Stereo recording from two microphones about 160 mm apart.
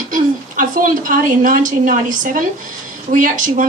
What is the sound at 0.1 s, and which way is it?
A woman's voice, 55° right (ahead or behind).